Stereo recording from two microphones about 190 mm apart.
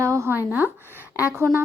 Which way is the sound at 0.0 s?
15° right (ahead or behind).